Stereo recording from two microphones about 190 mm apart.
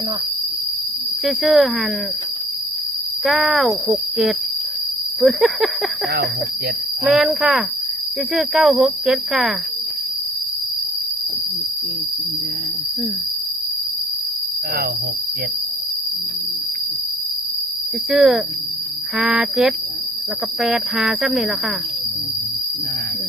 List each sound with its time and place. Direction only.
1.2 s speech: centre (ahead or behind)
3.2 s speech: centre (ahead or behind)
7.0 s speech: centre (ahead or behind)
18.1 s speech: centre (ahead or behind)